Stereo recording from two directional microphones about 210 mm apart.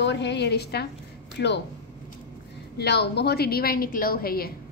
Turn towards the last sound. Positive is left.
turn(degrees=45)  # may be behind; listen again after turning